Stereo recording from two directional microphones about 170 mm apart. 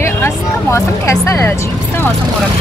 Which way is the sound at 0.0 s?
15° left (ahead or behind).